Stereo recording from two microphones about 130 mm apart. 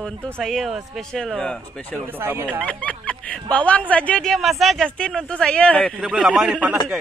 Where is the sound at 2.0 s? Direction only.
15° right (ahead or behind).